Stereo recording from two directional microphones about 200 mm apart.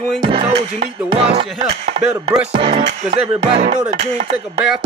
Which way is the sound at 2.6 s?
30° right (ahead or behind).